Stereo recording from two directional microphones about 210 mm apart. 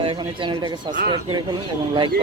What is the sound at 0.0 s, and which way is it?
Speech, 25° right (ahead or behind).